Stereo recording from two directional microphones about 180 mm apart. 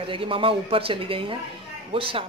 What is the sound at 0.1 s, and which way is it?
Speech, 30° right (ahead or behind).